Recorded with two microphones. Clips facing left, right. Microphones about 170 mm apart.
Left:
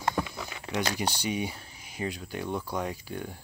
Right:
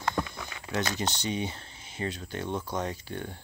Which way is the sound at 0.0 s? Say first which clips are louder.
Left 1 dB; 10° left (ahead or behind).